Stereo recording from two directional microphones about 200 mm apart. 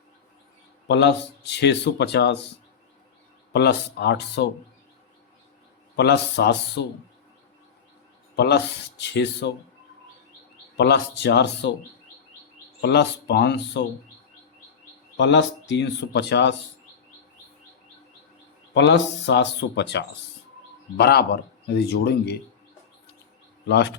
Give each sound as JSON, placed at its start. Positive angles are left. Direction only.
{"t": 0.9, "sound": "speech", "side_deg": 60}
{"t": 3.5, "sound": "speech", "side_deg": 55}
{"t": 6.0, "sound": "speech", "side_deg": 55}
{"t": 8.4, "sound": "speech", "side_deg": 55}
{"t": 10.8, "sound": "speech", "side_deg": 55}
{"t": 12.8, "sound": "speech", "side_deg": 55}
{"t": 15.2, "sound": "speech", "side_deg": 60}
{"t": 18.7, "sound": "speech", "side_deg": 60}
{"t": 23.6, "sound": "speech", "side_deg": 60}